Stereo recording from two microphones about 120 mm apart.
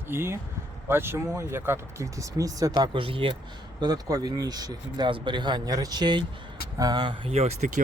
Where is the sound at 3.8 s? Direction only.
30° right (ahead or behind).